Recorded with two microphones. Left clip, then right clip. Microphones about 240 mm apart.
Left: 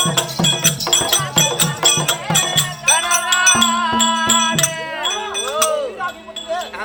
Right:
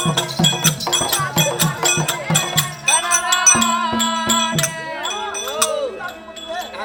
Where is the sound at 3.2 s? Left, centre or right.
Centre.